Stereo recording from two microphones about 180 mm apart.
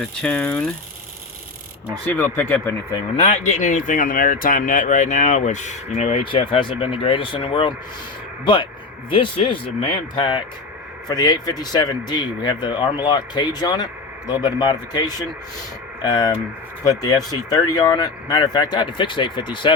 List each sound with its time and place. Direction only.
0.0 s speech: 5° left (ahead or behind)
2.1 s speech: 10° left (ahead or behind)
3.2 s speech: 40° left (ahead or behind)
9.0 s speech: 30° left (ahead or behind)